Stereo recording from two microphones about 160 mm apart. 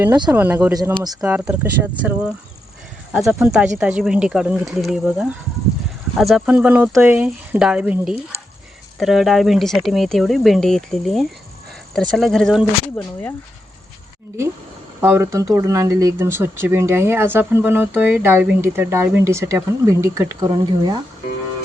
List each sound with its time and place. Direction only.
0.3 s speech: 10° right (ahead or behind)
0.7 s speech: 25° right (ahead or behind)
1.2 s speech: 10° right (ahead or behind)
15.0 s speech: 15° right (ahead or behind)